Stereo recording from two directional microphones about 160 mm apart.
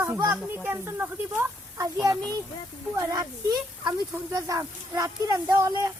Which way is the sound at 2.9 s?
20° right (ahead or behind).